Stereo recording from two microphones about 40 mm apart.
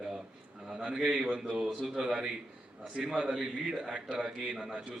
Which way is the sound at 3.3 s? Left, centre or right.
Centre.